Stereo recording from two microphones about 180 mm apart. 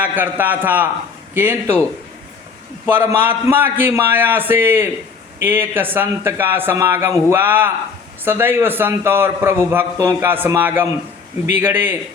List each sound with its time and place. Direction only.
0.0 s a man's voice: 10° right (ahead or behind)
2.8 s a man's voice: 10° right (ahead or behind)